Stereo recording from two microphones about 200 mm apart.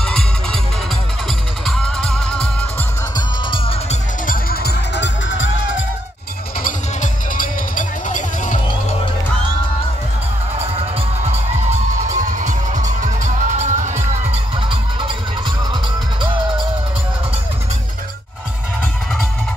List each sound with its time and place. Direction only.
0.0 s music: 5° left (ahead or behind)
1.7 s music: 5° left (ahead or behind)
3.2 s music: 25° left (ahead or behind)
4.3 s music: 50° left (ahead or behind); by 5.9 s 70° left (ahead or behind)
6.6 s music: 45° left (ahead or behind)
12.1 s music: 40° right (ahead or behind)